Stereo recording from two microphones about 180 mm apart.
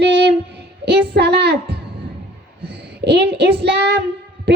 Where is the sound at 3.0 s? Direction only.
70° right (ahead or behind).